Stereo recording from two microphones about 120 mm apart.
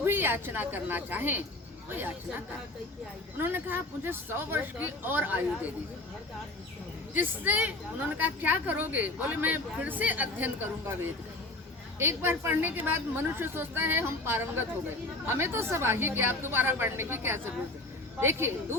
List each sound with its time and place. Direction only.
0.0 s a woman's voice: 20° right (ahead or behind)
3.3 s a woman's voice: 15° right (ahead or behind)
7.1 s a woman's voice: 15° right (ahead or behind)